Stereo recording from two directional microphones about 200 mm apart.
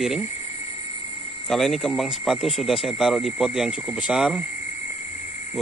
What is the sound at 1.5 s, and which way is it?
Speech, centre (ahead or behind).